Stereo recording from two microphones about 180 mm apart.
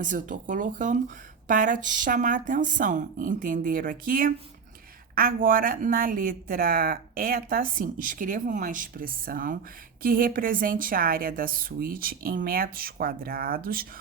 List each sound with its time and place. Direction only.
0.0 s speech: 45° right (ahead or behind)